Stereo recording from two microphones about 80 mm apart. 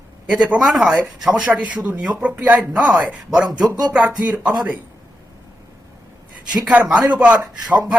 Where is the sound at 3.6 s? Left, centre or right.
Right.